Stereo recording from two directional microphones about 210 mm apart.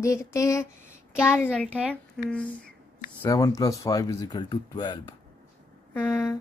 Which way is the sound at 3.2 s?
15° left (ahead or behind).